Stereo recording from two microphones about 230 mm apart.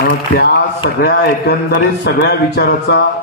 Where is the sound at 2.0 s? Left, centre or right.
Left.